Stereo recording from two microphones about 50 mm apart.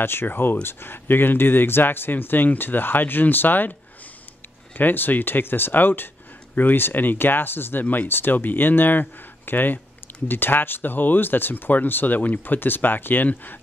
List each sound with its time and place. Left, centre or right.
0.0 s speech: left
4.7 s speech: left